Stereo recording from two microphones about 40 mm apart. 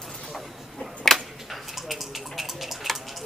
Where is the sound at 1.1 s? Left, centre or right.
Centre.